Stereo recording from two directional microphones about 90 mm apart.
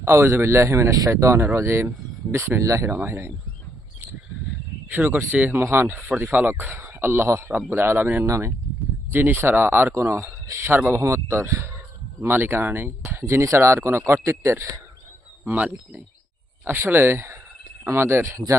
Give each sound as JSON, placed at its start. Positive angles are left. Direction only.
{"t": 0.0, "sound": "speech", "side_deg": -30}
{"t": 4.9, "sound": "speech", "side_deg": -20}
{"t": 15.4, "sound": "speech", "side_deg": -20}